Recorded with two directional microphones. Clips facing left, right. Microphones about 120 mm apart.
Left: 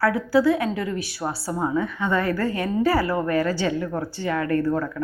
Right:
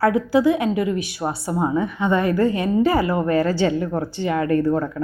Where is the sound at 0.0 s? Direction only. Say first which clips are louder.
Right 2 dB; 20° right (ahead or behind).